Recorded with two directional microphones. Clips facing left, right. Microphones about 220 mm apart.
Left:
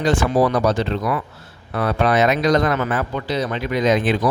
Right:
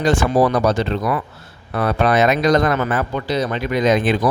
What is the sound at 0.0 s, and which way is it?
Speech, 45° right (ahead or behind).